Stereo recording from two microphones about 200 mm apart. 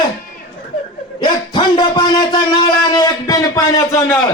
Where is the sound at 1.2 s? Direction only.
25° left (ahead or behind).